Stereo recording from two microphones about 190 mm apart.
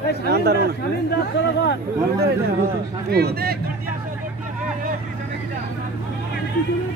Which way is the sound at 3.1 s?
55° right (ahead or behind).